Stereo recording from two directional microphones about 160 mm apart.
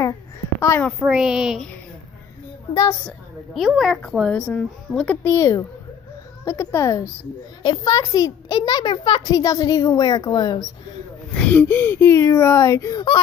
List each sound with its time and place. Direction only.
0.6 s speech: 15° left (ahead or behind)
1.0 s a child's voice: 5° right (ahead or behind)
2.7 s a child's voice: 25° left (ahead or behind)
3.1 s a child's voice: centre (ahead or behind); by 10.6 s 25° left (ahead or behind)
11.3 s speech: 10° left (ahead or behind)